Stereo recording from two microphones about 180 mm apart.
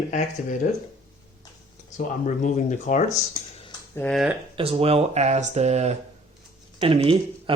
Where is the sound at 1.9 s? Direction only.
45° left (ahead or behind).